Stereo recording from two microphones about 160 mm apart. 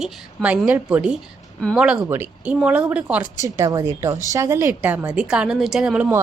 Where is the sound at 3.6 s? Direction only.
20° right (ahead or behind).